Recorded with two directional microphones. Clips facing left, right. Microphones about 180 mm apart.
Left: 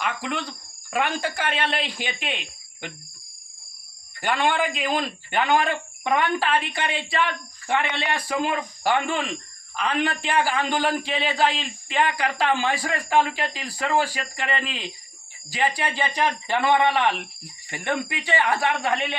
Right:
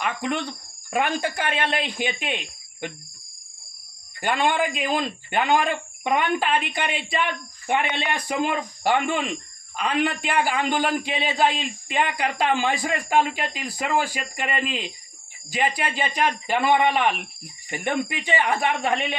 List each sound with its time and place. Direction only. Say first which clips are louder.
0.0 s cricket: right 2 dB; 25° right (ahead or behind)
1.1 s speech: right 1 dB; 20° right (ahead or behind)
4.2 s speech: right 1 dB; 15° right (ahead or behind)
16.2 s speech: right 1 dB; 15° right (ahead or behind)